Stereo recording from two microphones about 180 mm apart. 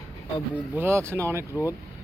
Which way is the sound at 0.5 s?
10° right (ahead or behind).